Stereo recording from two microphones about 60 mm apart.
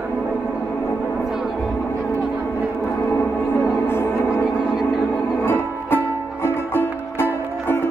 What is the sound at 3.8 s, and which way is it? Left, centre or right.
Music, left.